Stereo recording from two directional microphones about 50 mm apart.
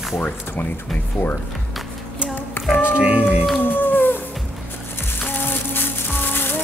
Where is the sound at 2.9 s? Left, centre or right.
Right.